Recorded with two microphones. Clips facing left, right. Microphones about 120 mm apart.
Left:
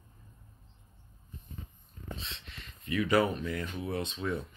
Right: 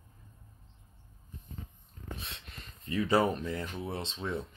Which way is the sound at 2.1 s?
55° right (ahead or behind).